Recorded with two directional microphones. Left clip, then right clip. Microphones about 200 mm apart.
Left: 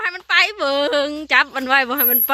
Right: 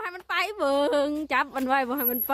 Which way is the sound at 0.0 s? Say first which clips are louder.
Left 11 dB; 10° right (ahead or behind).